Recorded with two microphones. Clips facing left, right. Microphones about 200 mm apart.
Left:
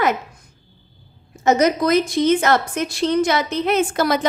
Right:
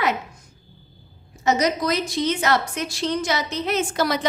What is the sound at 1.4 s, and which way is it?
A woman's voice, 50° left (ahead or behind).